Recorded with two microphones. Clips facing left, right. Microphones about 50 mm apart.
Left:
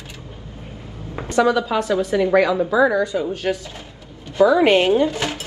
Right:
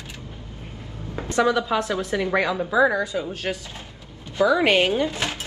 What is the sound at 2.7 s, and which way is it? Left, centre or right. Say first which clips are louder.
Speech: left 2 dB; centre.